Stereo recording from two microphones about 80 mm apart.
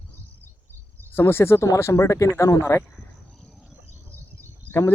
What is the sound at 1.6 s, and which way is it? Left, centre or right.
Speech, left.